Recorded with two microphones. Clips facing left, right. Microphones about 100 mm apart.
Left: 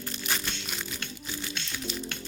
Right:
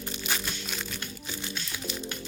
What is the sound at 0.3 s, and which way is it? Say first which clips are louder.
Music: even; 5° right (ahead or behind).